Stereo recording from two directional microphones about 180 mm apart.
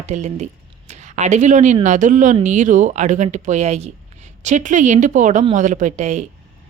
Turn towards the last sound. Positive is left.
turn(degrees=-40)  # may be behind; listen again after turning